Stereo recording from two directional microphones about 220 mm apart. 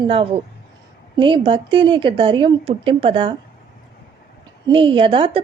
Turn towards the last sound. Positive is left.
turn(degrees=-25)  # may be behind; listen again after turning